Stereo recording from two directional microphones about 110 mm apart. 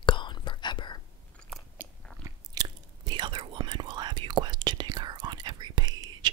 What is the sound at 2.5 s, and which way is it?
Whispering, 40° right (ahead or behind).